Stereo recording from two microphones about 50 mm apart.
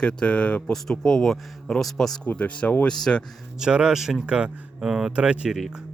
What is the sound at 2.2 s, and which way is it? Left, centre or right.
Speech, left.